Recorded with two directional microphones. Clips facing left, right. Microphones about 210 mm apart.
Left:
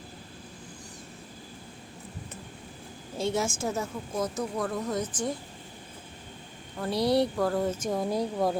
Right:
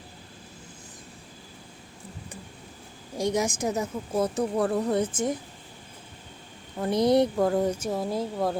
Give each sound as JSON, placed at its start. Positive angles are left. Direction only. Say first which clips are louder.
{"t": 3.2, "sound": "a woman's voice", "louder": "right 3 dB", "side_deg": -15}
{"t": 4.1, "sound": "a woman's voice", "louder": "right 6 dB", "side_deg": -30}
{"t": 6.7, "sound": "speech", "louder": "right 4 dB", "side_deg": -20}
{"t": 7.8, "sound": "a woman's voice", "louder": "even", "side_deg": -5}